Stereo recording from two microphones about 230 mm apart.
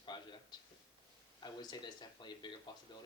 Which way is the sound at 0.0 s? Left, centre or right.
Centre.